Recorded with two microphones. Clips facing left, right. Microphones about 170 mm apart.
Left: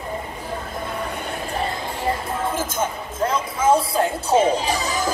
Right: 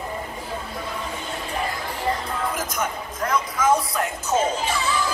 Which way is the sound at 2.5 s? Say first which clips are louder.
Left 3 dB; 25° left (ahead or behind).